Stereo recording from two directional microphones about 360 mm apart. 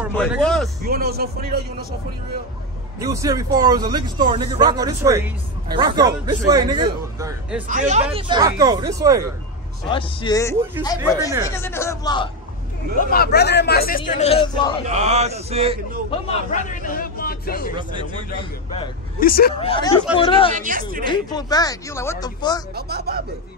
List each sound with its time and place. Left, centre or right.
0.0 s speech: centre
0.8 s a man's voice: right
3.0 s a man's voice: centre
7.6 s a man's voice: right
9.8 s speech: centre
13.0 s a man's voice: left
14.9 s a man's voice: centre
16.1 s speech: centre
20.5 s a man's voice: right
21.0 s speech: centre
22.8 s speech: right